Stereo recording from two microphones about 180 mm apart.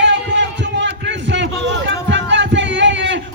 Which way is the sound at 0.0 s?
85° right.